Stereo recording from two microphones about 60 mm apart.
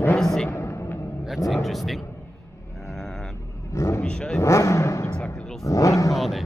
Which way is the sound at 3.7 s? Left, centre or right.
Left.